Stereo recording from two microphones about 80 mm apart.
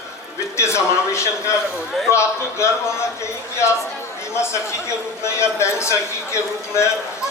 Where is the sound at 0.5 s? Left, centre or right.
Left.